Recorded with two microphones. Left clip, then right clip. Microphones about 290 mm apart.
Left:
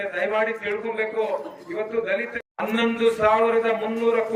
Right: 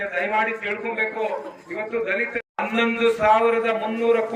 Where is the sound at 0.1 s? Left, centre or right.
Centre.